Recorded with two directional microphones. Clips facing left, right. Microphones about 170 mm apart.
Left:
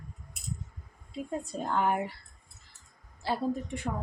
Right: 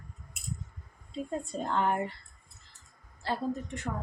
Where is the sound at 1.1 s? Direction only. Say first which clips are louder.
Even; 5° left (ahead or behind).